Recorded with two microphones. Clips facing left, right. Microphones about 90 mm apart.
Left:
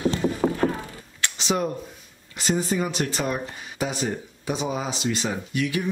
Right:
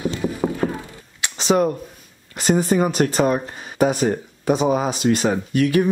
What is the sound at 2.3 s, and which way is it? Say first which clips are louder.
Speech: right 7 dB; 50° right (ahead or behind).